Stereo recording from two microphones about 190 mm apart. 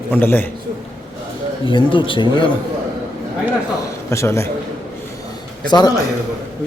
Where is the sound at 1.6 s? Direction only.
25° left (ahead or behind).